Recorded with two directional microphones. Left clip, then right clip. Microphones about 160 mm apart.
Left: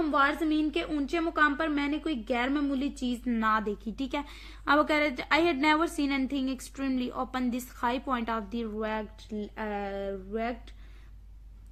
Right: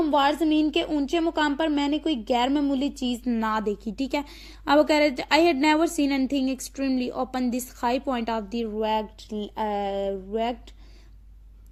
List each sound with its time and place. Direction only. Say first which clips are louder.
0.0 s a woman's voice: right 5 dB; 25° right (ahead or behind)